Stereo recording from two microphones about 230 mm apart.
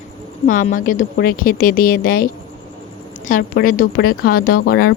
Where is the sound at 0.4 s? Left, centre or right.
Left.